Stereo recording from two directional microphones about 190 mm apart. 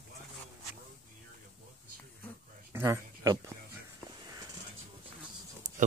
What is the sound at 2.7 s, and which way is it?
Speech, 15° right (ahead or behind).